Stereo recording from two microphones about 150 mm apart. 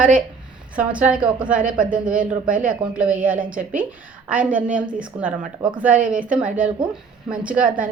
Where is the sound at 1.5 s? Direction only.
65° right (ahead or behind).